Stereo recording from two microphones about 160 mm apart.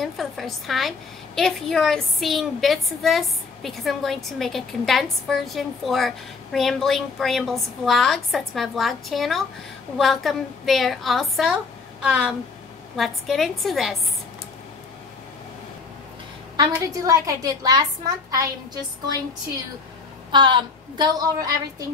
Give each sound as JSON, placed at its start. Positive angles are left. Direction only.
{"t": 0.0, "sound": "a woman's voice", "side_deg": 0}
{"t": 16.5, "sound": "a woman's voice", "side_deg": -20}
{"t": 20.2, "sound": "a woman's voice", "side_deg": -30}